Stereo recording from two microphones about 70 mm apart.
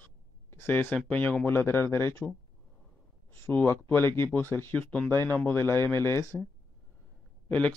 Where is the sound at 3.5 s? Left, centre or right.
Left.